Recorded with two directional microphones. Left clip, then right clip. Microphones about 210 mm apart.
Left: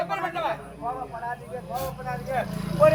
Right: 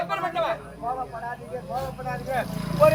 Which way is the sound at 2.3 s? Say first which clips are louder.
Even; centre (ahead or behind).